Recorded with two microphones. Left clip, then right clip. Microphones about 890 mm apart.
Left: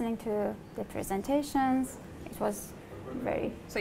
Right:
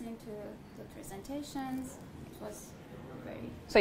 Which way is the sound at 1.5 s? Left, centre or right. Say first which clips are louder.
Left 11 dB; left.